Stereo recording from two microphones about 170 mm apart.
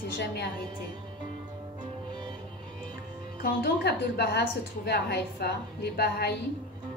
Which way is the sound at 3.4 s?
70° left (ahead or behind).